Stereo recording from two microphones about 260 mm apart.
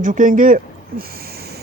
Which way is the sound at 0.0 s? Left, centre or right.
Right.